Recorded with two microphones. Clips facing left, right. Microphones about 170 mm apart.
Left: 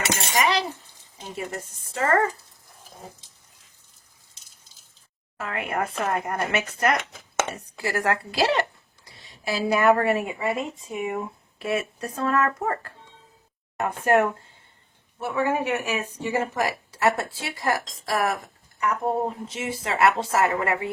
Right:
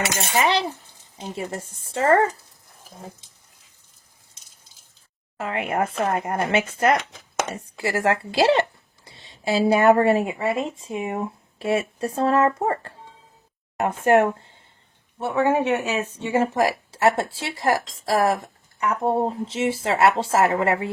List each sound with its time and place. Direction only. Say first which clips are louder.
1.4 s speech: right 1 dB; 25° right (ahead or behind)
5.4 s speech: right 4 dB; 25° right (ahead or behind)